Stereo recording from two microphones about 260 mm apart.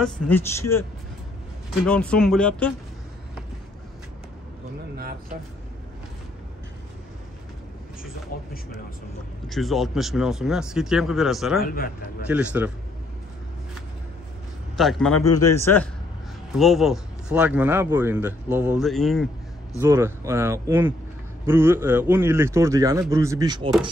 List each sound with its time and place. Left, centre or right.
0.0 s a man's voice: centre
1.9 s speech: centre
8.3 s speech: left
9.5 s speech: centre
11.6 s speech: left
12.3 s speech: centre
14.8 s a man's voice: centre
19.8 s speech: centre